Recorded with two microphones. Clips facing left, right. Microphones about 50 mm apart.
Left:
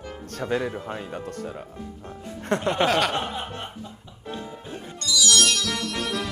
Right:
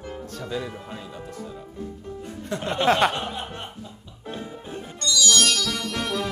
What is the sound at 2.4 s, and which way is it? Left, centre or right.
Speech, left.